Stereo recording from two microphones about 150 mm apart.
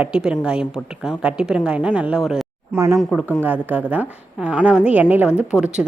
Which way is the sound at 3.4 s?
10° right (ahead or behind).